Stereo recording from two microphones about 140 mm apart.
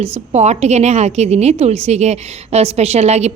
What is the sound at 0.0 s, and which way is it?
Speech, 50° right (ahead or behind).